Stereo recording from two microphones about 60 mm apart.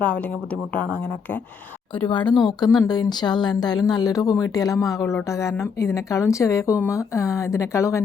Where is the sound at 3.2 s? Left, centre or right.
Left.